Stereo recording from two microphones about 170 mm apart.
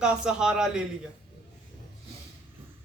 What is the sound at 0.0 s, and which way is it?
Speech, 5° right (ahead or behind).